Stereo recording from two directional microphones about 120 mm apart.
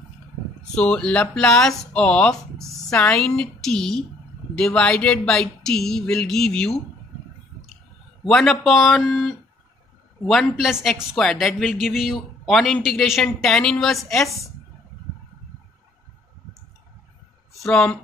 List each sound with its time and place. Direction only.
0.7 s a woman's voice: 10° left (ahead or behind)
17.6 s speech: 5° left (ahead or behind)